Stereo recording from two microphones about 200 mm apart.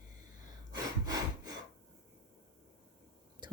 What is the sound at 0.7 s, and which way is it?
Sawing, 20° right (ahead or behind).